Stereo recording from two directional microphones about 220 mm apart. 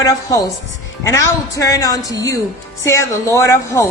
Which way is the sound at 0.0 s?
15° left (ahead or behind).